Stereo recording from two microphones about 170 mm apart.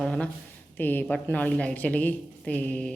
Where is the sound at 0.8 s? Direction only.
10° left (ahead or behind).